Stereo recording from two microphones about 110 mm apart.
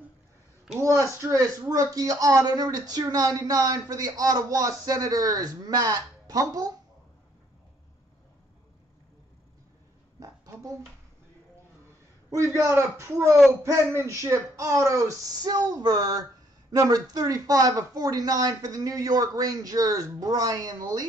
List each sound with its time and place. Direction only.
0.7 s speech: 30° right (ahead or behind)
10.2 s a sound: 30° right (ahead or behind)
12.3 s speech: 30° right (ahead or behind)